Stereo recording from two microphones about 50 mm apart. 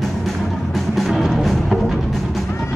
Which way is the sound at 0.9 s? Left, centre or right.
Centre.